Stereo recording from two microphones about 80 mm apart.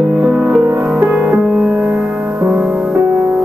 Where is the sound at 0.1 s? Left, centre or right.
Centre.